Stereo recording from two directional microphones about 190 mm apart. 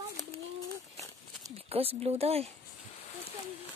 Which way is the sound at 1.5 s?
30° right (ahead or behind).